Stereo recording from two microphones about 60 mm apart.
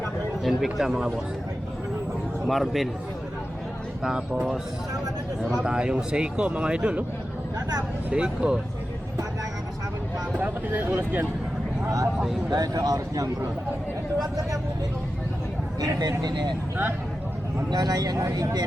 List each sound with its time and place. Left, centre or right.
0.4 s speech: centre
2.5 s speech: centre
5.6 s speech: centre
8.1 s speech: centre
10.4 s speech: right
12.5 s speech: right
15.8 s speech: right
17.7 s speech: right